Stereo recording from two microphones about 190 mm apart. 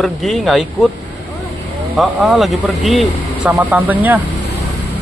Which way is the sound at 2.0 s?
Centre (ahead or behind).